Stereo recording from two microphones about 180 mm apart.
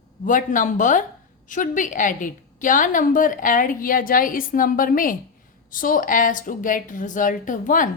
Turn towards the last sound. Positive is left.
turn(degrees=45)  # may be behind; listen again after turning